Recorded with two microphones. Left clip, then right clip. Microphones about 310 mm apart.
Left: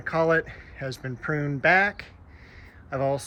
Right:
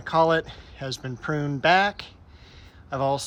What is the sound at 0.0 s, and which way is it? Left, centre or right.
Speech, centre.